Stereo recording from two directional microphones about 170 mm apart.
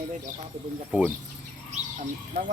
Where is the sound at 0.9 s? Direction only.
5° right (ahead or behind).